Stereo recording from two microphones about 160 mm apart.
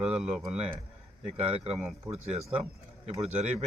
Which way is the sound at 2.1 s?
40° right (ahead or behind).